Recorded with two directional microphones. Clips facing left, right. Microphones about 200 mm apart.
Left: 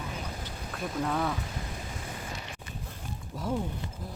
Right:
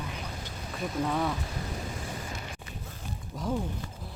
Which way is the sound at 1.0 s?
Centre (ahead or behind).